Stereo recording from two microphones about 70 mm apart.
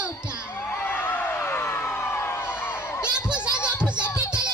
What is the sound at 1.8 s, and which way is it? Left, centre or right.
Crowd, left.